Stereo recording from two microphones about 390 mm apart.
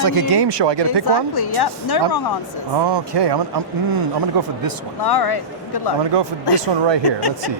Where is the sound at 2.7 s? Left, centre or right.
Right.